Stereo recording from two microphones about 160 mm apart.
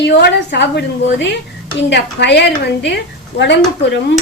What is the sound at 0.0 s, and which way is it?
A woman's voice, 90° left.